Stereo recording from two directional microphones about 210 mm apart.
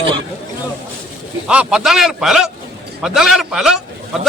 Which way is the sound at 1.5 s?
5° right (ahead or behind).